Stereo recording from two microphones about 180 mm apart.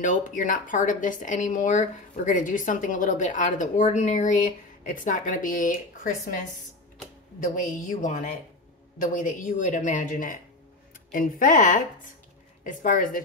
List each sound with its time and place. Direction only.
0.0 s speech: 45° left (ahead or behind)